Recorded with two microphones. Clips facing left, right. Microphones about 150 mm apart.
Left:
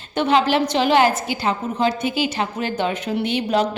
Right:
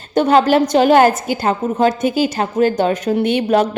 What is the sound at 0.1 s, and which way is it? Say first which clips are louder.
A woman's voice: right 6 dB; 40° right (ahead or behind).